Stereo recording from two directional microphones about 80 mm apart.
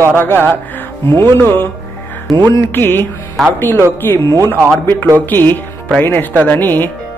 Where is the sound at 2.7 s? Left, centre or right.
Left.